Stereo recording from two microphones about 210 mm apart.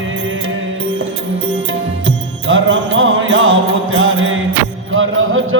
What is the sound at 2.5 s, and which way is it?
Mantra, 70° right (ahead or behind).